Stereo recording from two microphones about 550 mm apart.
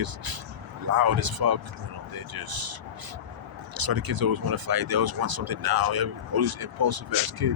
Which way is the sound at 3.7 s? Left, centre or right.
Right.